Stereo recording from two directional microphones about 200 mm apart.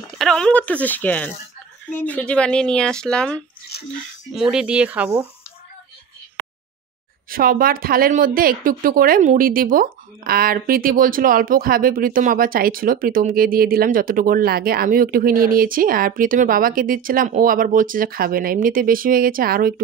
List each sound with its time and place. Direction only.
0.2 s speech: 5° left (ahead or behind)
7.2 s speech: 45° right (ahead or behind)